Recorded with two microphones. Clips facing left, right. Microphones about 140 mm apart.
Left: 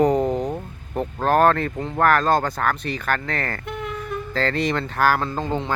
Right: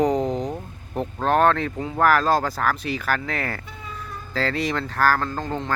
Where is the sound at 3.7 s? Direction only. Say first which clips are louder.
Left 8 dB; 75° left (ahead or behind).